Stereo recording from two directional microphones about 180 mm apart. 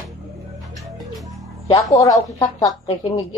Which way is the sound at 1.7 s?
20° left (ahead or behind).